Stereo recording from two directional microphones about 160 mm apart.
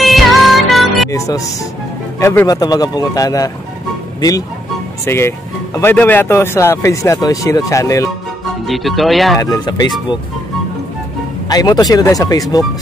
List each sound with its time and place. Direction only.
0.0 s music: centre (ahead or behind)
1.1 s speech: 20° left (ahead or behind)
8.6 s speech: centre (ahead or behind)
9.4 s speech: 25° left (ahead or behind)
11.4 s speech: 25° left (ahead or behind)